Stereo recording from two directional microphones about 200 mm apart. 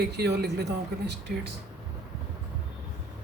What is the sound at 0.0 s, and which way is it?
Speech, 55° right (ahead or behind).